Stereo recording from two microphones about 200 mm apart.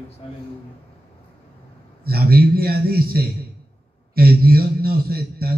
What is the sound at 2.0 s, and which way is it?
A man's voice, 50° right (ahead or behind).